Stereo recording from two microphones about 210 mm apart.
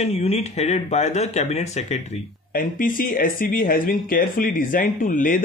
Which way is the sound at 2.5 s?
45° left (ahead or behind).